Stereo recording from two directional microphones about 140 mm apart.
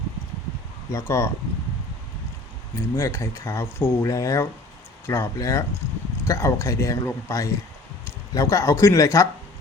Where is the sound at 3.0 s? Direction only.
20° left (ahead or behind).